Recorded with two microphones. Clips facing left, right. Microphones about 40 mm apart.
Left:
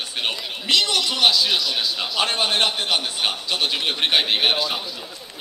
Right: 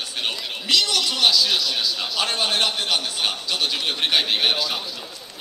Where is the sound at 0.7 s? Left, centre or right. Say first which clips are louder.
Left 1 dB; left; by 1.8 s centre.